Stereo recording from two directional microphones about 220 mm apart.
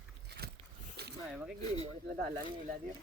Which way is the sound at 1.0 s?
50° right (ahead or behind).